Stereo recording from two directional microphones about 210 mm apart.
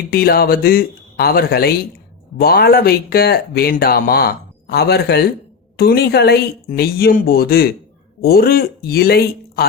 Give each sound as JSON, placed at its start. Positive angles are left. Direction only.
{"t": 0.1, "sound": "speech", "side_deg": 45}